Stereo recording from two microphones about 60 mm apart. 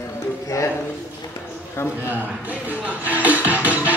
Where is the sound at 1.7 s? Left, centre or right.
Left.